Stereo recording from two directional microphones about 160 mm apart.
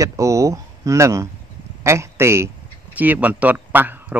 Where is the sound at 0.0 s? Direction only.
20° right (ahead or behind).